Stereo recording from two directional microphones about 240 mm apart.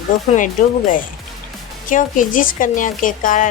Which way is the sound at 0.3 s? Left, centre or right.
Left.